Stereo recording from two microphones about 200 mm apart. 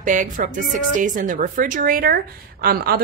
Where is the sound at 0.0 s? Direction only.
40° right (ahead or behind).